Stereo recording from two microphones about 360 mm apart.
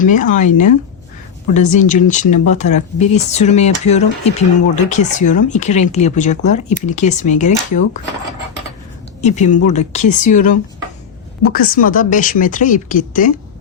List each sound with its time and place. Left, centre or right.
0.0 s speech: left
9.2 s speech: centre